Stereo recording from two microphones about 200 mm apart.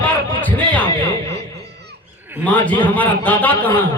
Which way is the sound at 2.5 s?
5° left (ahead or behind).